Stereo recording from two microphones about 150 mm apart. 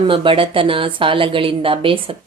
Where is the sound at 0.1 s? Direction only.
35° right (ahead or behind).